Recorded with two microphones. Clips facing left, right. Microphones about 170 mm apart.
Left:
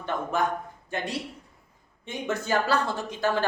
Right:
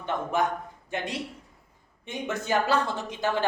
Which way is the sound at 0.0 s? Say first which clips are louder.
Even; 20° right (ahead or behind).